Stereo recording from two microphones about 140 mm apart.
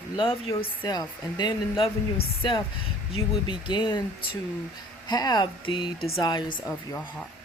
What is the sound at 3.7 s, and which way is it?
Speech, 35° left (ahead or behind).